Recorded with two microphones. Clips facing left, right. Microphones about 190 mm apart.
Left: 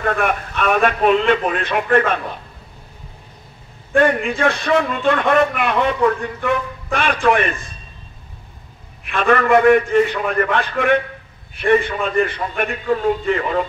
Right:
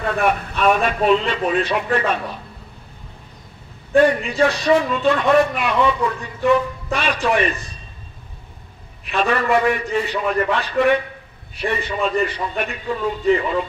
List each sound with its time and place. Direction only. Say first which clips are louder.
0.0 s a man's voice: even; 55° left (ahead or behind)
3.9 s a man's voice: right 1 dB; 55° left (ahead or behind)
9.0 s a man's voice: left 3 dB; 55° left (ahead or behind)